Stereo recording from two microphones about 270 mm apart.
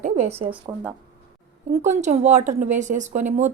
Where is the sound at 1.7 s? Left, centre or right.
Right.